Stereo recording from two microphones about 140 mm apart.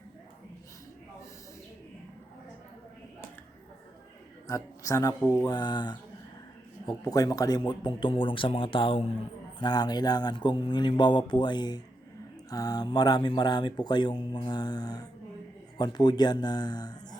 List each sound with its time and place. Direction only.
4.4 s speech: 25° left (ahead or behind)